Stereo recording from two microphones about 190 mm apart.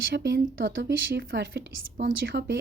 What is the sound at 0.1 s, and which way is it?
A woman's voice, 65° right (ahead or behind).